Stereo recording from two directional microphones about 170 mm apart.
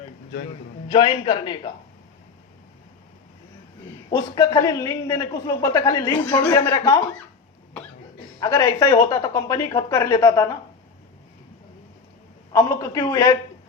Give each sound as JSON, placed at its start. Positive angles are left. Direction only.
{"t": 0.9, "sound": "a man's voice", "side_deg": 35}
{"t": 4.1, "sound": "speech", "side_deg": 25}
{"t": 8.4, "sound": "speech", "side_deg": 25}
{"t": 12.5, "sound": "speech", "side_deg": 20}